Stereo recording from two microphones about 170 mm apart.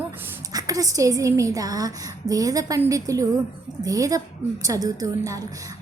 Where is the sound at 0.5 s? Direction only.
20° right (ahead or behind).